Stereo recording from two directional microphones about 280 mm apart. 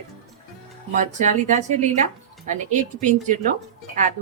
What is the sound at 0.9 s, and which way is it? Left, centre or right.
A woman's voice, right.